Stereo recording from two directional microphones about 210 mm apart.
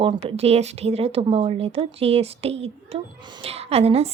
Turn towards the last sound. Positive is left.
turn(degrees=-30)  # may be behind; listen again after turning